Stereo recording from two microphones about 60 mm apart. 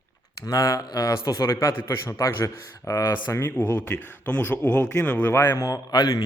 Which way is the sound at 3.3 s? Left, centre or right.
Left.